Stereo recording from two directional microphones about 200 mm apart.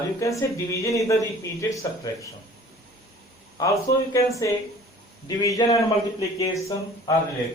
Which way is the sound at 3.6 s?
15° left (ahead or behind).